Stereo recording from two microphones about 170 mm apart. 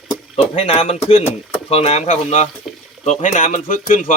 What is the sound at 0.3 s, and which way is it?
Speech, 40° left (ahead or behind).